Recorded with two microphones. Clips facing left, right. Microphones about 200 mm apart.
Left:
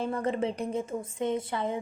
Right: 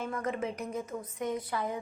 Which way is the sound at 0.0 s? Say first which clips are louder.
Left 5 dB; 30° left (ahead or behind).